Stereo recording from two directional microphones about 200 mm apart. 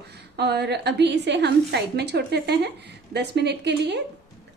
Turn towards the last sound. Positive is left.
turn(degrees=-60)  # may be behind; listen again after turning